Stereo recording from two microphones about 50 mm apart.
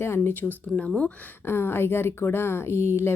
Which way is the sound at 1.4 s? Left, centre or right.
Left.